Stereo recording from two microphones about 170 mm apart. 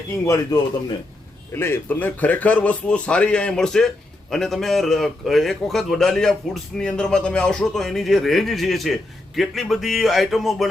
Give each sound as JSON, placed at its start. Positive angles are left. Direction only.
{"t": 0.3, "sound": "a man's voice", "side_deg": 20}